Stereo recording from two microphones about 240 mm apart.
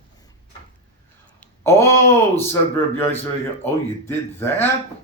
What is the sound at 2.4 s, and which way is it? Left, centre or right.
Speech, centre.